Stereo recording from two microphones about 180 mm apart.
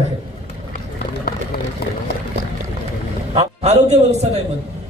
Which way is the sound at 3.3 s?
40° right (ahead or behind).